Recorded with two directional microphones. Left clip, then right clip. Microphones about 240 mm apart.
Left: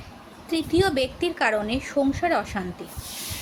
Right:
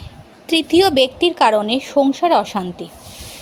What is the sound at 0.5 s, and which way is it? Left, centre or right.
A woman's voice, right.